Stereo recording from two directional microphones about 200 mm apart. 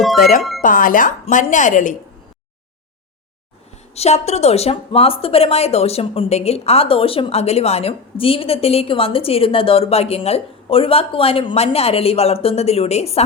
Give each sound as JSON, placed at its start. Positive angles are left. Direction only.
{"t": 0.6, "sound": "speech", "side_deg": 45}
{"t": 3.9, "sound": "speech", "side_deg": 30}